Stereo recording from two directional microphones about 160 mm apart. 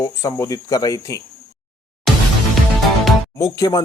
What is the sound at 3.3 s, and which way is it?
Speech, 20° left (ahead or behind).